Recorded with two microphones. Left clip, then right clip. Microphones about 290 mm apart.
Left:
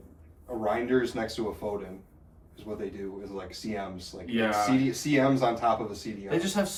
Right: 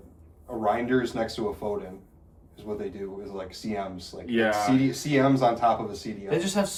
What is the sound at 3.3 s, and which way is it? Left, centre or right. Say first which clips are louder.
Speech: right 4 dB; centre.